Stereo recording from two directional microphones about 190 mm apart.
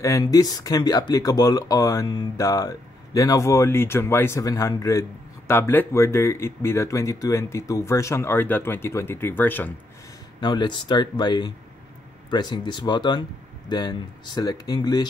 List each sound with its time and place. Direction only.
0.0 s speech: 15° left (ahead or behind)
10.4 s speech: 25° left (ahead or behind)